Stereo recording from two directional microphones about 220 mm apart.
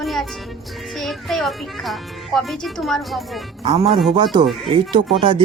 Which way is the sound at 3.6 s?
25° right (ahead or behind).